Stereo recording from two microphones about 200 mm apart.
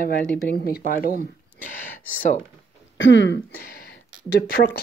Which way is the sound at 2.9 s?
65° left (ahead or behind).